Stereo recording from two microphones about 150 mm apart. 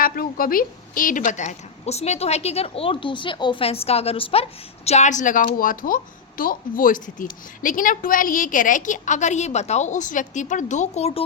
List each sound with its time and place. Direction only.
0.0 s speech: 75° left (ahead or behind); by 4.4 s 40° left (ahead or behind)
4.9 s speech: 50° left (ahead or behind)